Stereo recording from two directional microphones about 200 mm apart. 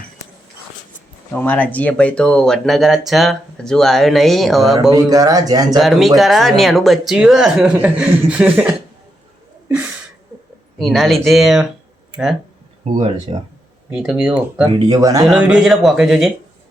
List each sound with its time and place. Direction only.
1.3 s speech: 10° left (ahead or behind)
4.9 s speech: 15° right (ahead or behind)
5.7 s speech: centre (ahead or behind)
9.6 s a sound: 10° right (ahead or behind)
10.8 s speech: centre (ahead or behind)
13.3 s speech: 30° right (ahead or behind)
13.9 s speech: 5° right (ahead or behind)
14.8 s speech: 20° right (ahead or behind)
15.2 s speech: 5° right (ahead or behind)